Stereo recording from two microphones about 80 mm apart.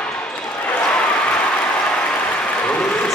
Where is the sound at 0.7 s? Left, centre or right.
Centre.